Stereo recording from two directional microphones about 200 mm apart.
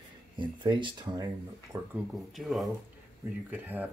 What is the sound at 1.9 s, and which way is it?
Speech, centre (ahead or behind).